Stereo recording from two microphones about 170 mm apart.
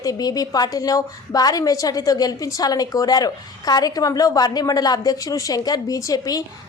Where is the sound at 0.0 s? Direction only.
20° left (ahead or behind).